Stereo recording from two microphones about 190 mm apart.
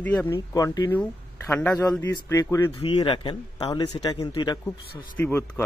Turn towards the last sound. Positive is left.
turn(degrees=10)  # may be behind; listen again after turning